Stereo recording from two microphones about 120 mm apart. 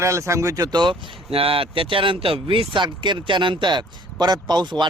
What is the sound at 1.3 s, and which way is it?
Speech, 50° right (ahead or behind).